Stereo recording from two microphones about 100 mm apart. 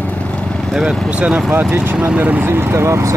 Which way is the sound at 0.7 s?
Centre (ahead or behind).